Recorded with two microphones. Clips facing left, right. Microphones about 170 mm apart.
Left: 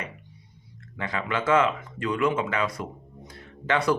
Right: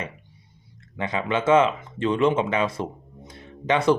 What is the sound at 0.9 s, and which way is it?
Speech, 20° right (ahead or behind).